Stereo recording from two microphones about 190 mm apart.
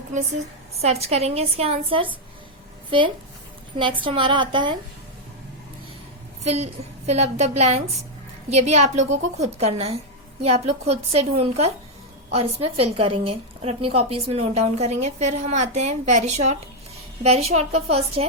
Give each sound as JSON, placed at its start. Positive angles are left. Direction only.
{"t": 0.1, "sound": "a woman's voice", "side_deg": -35}
{"t": 4.0, "sound": "a woman's voice", "side_deg": -25}
{"t": 6.4, "sound": "a woman's voice", "side_deg": -35}